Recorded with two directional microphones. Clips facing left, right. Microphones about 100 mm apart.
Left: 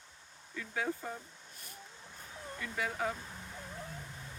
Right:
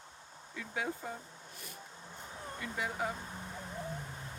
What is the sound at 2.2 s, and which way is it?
Vehicle, 20° right (ahead or behind).